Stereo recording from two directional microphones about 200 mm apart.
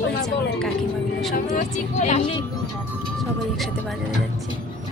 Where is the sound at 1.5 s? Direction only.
35° left (ahead or behind).